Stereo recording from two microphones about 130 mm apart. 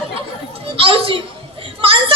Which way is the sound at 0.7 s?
45° right (ahead or behind).